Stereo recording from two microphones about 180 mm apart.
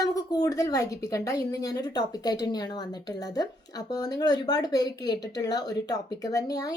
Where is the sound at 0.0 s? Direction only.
20° left (ahead or behind).